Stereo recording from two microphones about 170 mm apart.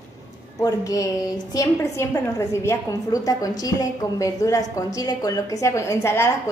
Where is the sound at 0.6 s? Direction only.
20° left (ahead or behind).